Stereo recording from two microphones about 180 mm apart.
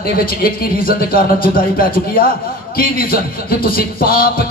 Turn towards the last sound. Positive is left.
turn(degrees=55)  # may be behind; listen again after turning